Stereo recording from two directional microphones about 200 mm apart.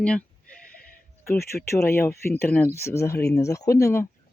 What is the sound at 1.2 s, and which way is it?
Speech, 15° left (ahead or behind).